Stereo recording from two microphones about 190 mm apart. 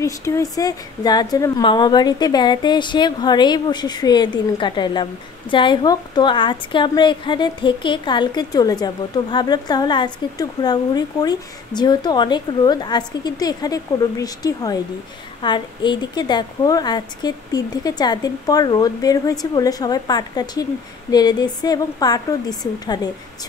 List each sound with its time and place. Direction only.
0.0 s a woman's voice: 15° left (ahead or behind)